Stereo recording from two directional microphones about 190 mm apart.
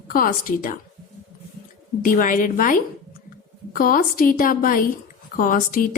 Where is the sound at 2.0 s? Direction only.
45° left (ahead or behind).